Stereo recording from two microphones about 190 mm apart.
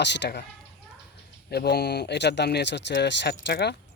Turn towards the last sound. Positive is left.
turn(degrees=65)  # may be behind; listen again after turning